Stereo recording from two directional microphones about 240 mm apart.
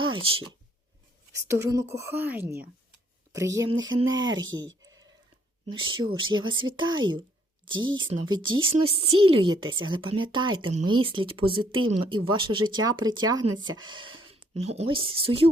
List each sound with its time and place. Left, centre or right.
0.1 s a woman's voice: right